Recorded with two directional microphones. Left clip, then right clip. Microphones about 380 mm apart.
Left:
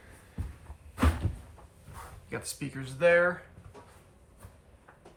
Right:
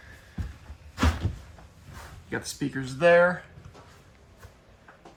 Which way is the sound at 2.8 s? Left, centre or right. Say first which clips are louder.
Right 4 dB; centre.